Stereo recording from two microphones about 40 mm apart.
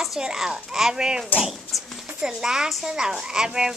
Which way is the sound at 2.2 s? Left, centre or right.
Centre.